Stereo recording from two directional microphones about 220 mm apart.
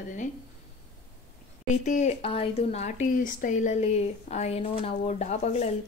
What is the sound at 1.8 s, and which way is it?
A woman's voice, 35° left (ahead or behind).